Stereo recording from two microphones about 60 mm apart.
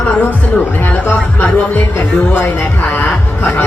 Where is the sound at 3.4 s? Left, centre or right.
Left.